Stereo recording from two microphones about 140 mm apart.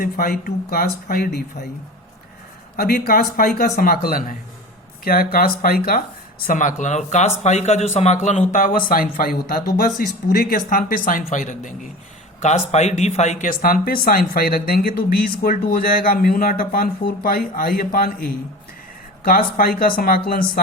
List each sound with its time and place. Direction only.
0.0 s speech: 90° left
2.7 s speech: 90° left
6.5 s speech: 65° left (ahead or behind)
12.4 s speech: 55° left (ahead or behind); by 20.4 s 90° left